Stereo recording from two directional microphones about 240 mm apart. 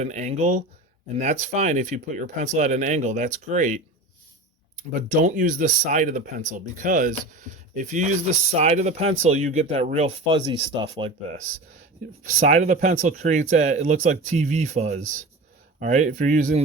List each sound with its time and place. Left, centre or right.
0.0 s speech: right
4.8 s speech: right
12.2 s speech: right